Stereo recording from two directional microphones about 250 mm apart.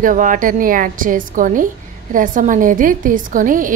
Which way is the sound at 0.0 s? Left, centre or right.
Right.